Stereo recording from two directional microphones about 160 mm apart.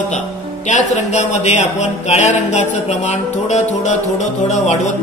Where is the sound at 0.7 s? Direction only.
45° left (ahead or behind).